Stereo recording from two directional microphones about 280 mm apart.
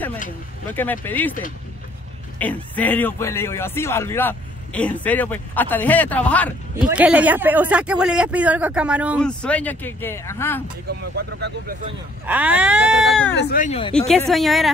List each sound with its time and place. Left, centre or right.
0.7 s speech: centre
2.4 s speech: centre
10.9 s speech: right
12.3 s speech: centre
13.4 s speech: left
13.9 s speech: centre